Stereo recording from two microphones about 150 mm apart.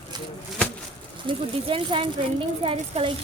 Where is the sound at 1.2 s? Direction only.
35° right (ahead or behind).